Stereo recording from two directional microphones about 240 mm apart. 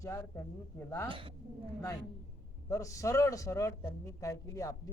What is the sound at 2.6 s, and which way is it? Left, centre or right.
A man's voice, centre.